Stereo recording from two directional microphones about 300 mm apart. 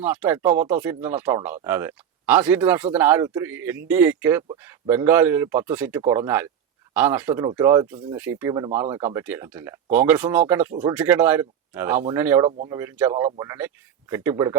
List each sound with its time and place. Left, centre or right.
0.0 s speech: centre